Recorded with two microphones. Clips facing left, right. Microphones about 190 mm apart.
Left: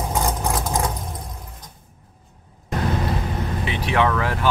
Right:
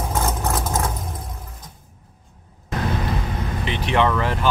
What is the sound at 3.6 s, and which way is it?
Vehicle, 5° left (ahead or behind).